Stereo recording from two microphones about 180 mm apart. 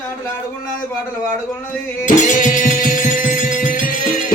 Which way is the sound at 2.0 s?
45° left (ahead or behind).